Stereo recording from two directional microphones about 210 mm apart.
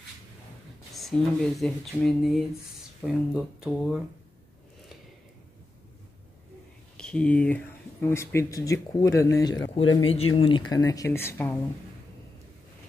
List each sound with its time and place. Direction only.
0.9 s speech: centre (ahead or behind)
7.0 s speech: 5° left (ahead or behind)